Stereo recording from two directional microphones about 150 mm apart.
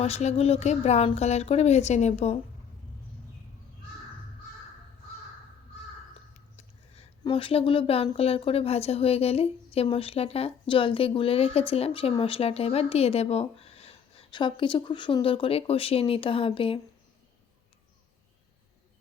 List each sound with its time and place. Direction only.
0.0 s speech: 45° left (ahead or behind)
6.6 s speech: 45° left (ahead or behind)